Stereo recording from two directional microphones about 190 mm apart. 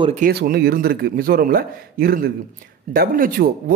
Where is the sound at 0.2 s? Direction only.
55° right (ahead or behind).